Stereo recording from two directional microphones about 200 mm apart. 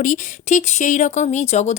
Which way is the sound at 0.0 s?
40° left (ahead or behind).